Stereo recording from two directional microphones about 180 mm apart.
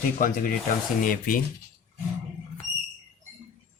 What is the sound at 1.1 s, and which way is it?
Speech, 50° left (ahead or behind).